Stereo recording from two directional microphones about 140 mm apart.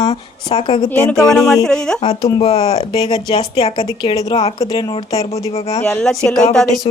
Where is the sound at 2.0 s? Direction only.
30° left (ahead or behind).